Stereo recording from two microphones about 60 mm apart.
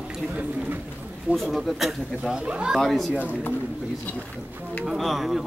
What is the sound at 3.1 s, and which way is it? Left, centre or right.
Speech, right.